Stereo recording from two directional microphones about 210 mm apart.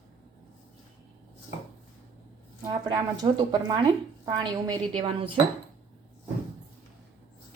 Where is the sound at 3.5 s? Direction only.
20° right (ahead or behind).